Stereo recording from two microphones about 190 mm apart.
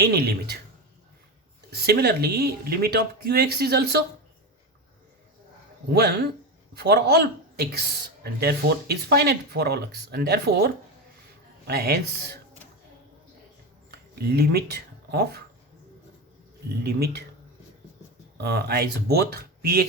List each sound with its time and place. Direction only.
0.0 s speech: 55° right (ahead or behind)
1.7 s speech: 60° right (ahead or behind)
5.9 s speech: 60° right (ahead or behind)
11.7 s speech: 60° right (ahead or behind)
14.2 s speech: 55° right (ahead or behind)
16.8 s speech: 55° right (ahead or behind)
18.3 s speech: 60° right (ahead or behind)